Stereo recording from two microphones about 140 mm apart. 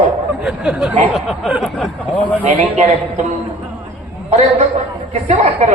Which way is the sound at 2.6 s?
50° right (ahead or behind).